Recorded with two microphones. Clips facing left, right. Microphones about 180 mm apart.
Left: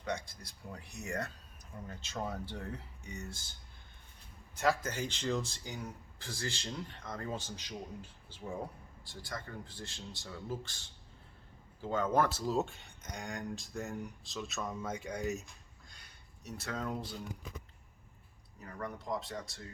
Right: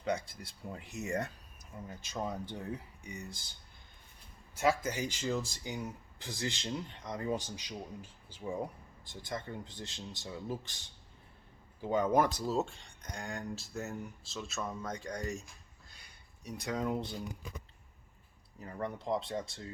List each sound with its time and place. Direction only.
0.7 s speech: 20° right (ahead or behind)
4.5 s speech: 10° right (ahead or behind)
5.6 s speech: 20° right (ahead or behind)
12.5 s speech: centre (ahead or behind)
15.9 s a sound: 10° right (ahead or behind)
18.6 s speech: 30° right (ahead or behind)